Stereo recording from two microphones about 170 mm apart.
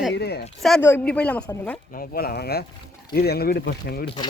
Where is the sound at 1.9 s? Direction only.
60° left (ahead or behind).